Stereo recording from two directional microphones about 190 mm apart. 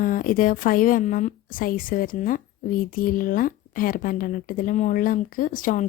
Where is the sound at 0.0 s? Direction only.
45° left (ahead or behind).